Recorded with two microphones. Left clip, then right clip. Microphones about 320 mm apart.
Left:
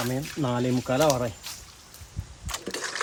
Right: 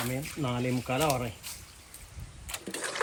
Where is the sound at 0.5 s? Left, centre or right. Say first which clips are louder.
Left 6 dB; left.